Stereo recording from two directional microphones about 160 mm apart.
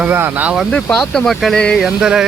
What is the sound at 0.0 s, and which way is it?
Speech, 10° right (ahead or behind).